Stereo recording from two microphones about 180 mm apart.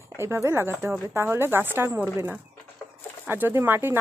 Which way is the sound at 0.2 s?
15° right (ahead or behind).